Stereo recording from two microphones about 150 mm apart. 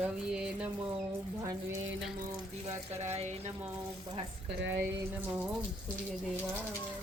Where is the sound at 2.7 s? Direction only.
45° right (ahead or behind).